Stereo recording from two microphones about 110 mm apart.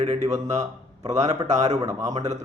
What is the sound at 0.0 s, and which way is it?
Speech, 85° right.